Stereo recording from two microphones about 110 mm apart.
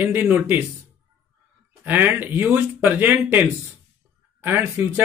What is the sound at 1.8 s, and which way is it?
Speech, 15° right (ahead or behind).